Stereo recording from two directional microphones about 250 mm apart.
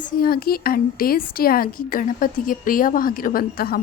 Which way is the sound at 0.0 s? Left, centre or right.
Left.